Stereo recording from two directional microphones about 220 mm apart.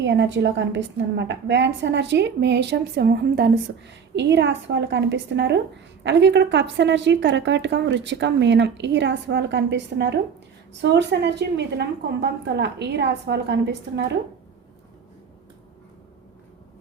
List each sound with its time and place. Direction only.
0.0 s a woman's voice: 55° right (ahead or behind)